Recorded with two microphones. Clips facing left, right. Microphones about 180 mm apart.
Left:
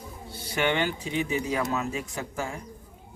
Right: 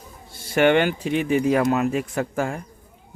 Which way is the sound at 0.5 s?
60° right (ahead or behind).